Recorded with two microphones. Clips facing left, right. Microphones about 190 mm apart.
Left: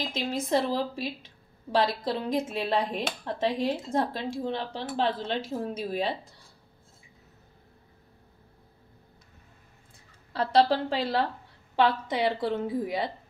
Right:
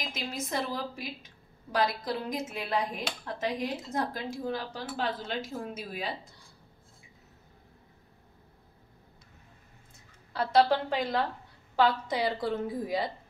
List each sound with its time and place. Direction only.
0.0 s a woman's voice: 30° left (ahead or behind)
10.3 s a woman's voice: 30° left (ahead or behind)